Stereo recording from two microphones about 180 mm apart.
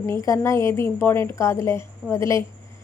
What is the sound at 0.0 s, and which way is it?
A woman's voice, 15° left (ahead or behind).